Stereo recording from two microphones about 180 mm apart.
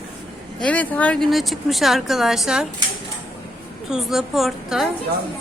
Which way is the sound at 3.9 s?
Centre (ahead or behind).